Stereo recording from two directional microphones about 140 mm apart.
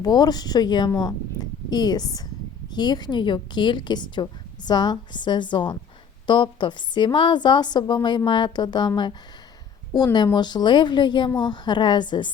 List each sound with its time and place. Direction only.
0.0 s a woman's voice: 30° left (ahead or behind)
9.9 s a woman's voice: 30° left (ahead or behind)